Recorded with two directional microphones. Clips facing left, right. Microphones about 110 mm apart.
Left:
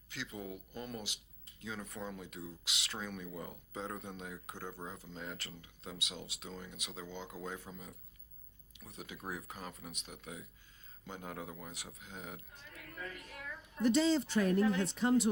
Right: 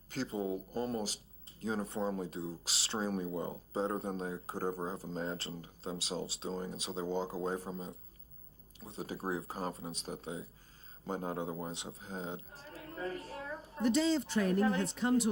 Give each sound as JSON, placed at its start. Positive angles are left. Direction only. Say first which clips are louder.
{"t": 0.1, "sound": "a man's voice", "louder": "right 8 dB", "side_deg": -35}